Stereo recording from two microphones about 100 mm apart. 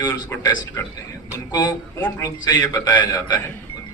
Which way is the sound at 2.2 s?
40° left (ahead or behind).